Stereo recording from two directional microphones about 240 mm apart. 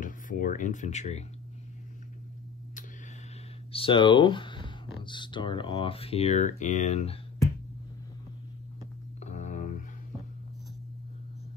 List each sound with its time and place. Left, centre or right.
0.0 s speech: left
3.7 s speech: left
9.2 s music: left